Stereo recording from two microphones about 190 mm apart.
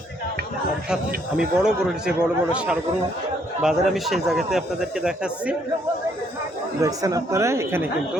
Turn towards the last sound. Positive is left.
turn(degrees=-15)  # may be behind; listen again after turning